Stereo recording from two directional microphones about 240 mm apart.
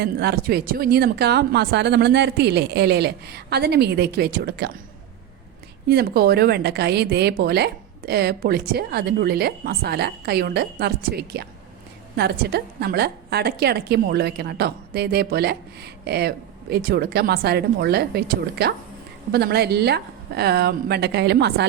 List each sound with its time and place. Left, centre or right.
0.0 s a woman's voice: right
5.9 s a woman's voice: right